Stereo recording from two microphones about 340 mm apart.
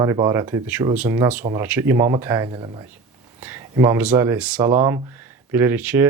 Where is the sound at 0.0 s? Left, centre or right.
Centre.